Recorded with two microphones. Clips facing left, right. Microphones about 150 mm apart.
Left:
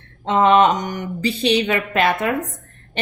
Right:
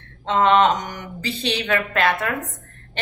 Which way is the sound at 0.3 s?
15° left (ahead or behind).